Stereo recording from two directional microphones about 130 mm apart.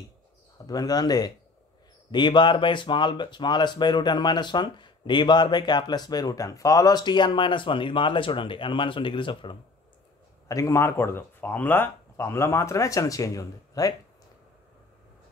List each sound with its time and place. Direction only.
0.7 s speech: 30° left (ahead or behind)
10.5 s speech: 25° left (ahead or behind)